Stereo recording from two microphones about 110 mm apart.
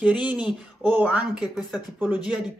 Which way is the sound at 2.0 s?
15° right (ahead or behind).